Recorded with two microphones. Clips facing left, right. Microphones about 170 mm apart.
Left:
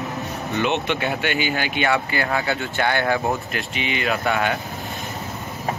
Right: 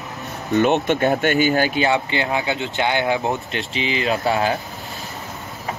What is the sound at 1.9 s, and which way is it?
Speech, 25° right (ahead or behind).